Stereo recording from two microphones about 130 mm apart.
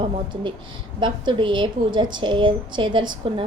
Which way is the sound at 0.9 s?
35° right (ahead or behind).